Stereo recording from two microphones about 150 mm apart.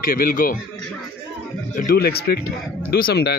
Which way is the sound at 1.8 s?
85° left.